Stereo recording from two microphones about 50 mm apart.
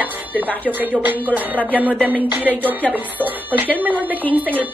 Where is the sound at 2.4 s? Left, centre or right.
Right.